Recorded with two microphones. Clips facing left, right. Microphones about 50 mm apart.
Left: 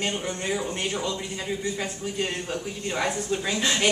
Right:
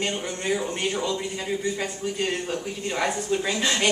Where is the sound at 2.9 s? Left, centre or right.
Centre.